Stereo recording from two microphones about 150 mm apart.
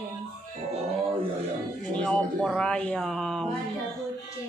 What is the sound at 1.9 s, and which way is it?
A woman's voice, 5° left (ahead or behind).